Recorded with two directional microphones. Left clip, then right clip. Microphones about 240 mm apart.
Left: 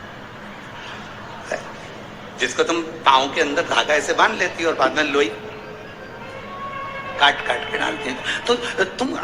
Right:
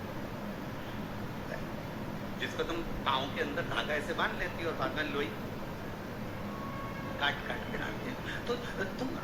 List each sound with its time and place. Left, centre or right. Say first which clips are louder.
2.4 s a man's voice: left 16 dB; left
7.2 s a man's voice: left 17 dB; left